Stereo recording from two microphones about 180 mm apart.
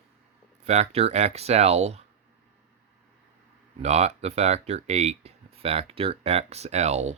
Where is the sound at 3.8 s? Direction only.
35° right (ahead or behind).